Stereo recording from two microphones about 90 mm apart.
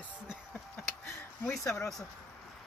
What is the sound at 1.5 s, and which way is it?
Speech, 30° left (ahead or behind).